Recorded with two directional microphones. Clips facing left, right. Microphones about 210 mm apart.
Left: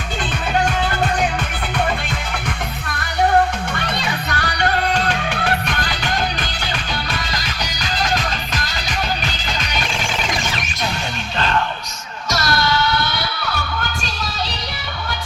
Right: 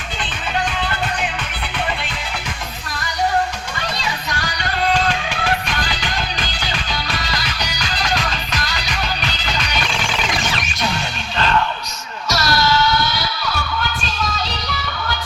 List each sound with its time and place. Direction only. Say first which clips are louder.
4.0 s music: left 2 dB; 60° left (ahead or behind)
12.3 s music: right 1 dB; 55° left (ahead or behind)